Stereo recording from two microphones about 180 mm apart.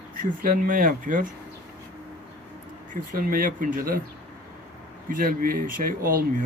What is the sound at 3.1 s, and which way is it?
Speech, 50° right (ahead or behind).